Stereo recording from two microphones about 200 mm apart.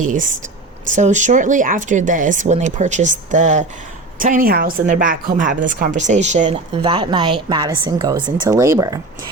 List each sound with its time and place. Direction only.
0.0 s a woman's voice: 40° right (ahead or behind); by 9.0 s 15° right (ahead or behind)